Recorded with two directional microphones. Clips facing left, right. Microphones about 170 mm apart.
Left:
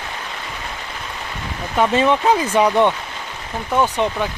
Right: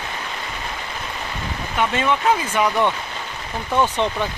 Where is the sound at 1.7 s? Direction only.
35° left (ahead or behind).